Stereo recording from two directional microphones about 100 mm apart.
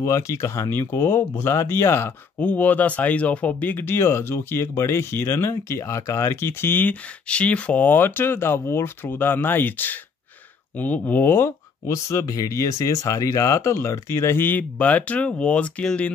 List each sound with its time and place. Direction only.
0.0 s speech: 30° left (ahead or behind); by 16.1 s 10° left (ahead or behind)